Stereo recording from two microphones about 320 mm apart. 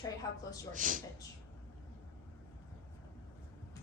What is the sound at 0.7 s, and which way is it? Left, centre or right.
Speech, right.